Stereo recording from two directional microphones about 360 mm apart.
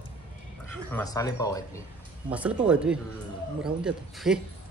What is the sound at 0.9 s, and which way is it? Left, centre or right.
Speech, centre.